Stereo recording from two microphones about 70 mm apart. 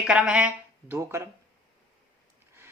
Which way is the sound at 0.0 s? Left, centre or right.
Centre.